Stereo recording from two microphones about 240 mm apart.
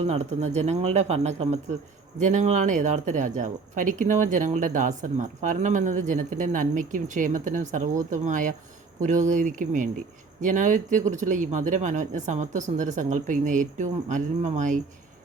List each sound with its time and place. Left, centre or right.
0.1 s speech: right